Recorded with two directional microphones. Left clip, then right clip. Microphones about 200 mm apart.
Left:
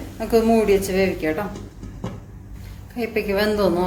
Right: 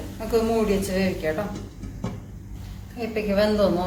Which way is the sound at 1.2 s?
50° left (ahead or behind).